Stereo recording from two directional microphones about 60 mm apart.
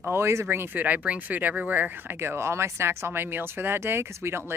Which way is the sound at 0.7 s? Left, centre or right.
Right.